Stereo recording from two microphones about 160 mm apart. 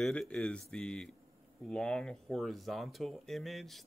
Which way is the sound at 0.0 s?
5° left (ahead or behind).